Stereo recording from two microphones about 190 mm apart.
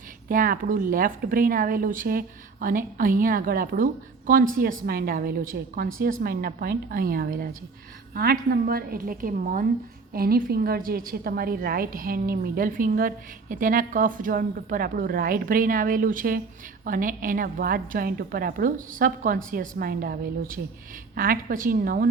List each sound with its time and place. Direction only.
0.3 s a woman's voice: 45° right (ahead or behind)